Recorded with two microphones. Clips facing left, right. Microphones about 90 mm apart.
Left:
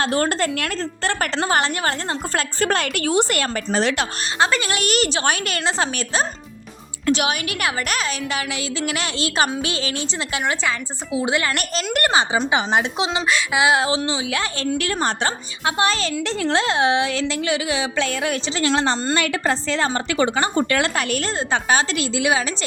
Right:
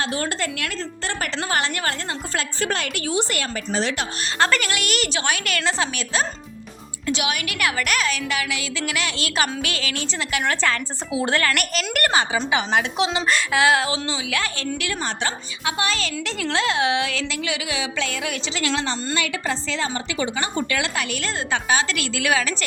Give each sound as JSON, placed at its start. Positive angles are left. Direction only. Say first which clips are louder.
{"t": 0.0, "sound": "a woman's voice", "louder": "left 5 dB", "side_deg": 45}
{"t": 2.3, "sound": "speech", "louder": "left 4 dB", "side_deg": 45}
{"t": 4.4, "sound": "a woman's voice", "louder": "left 1 dB", "side_deg": 15}
{"t": 4.7, "sound": "a woman's voice", "louder": "left 4 dB", "side_deg": 35}
{"t": 10.4, "sound": "a woman's voice", "louder": "right 1 dB", "side_deg": 15}
{"t": 11.5, "sound": "speech", "louder": "left 1 dB", "side_deg": 30}
{"t": 14.8, "sound": "a woman's voice", "louder": "left 5 dB", "side_deg": 40}
{"t": 19.1, "sound": "a woman's voice", "louder": "left 4 dB", "side_deg": 45}